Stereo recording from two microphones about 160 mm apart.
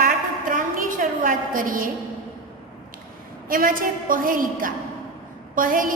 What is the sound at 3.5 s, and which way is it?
A woman's voice, 60° right (ahead or behind).